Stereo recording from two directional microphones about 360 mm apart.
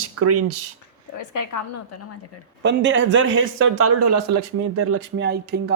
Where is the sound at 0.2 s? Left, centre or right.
Right.